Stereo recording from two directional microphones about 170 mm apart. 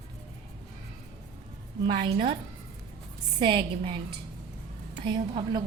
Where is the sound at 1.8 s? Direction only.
30° right (ahead or behind).